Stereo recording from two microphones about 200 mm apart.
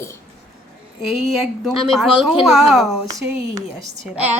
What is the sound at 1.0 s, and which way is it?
A woman's voice, centre (ahead or behind).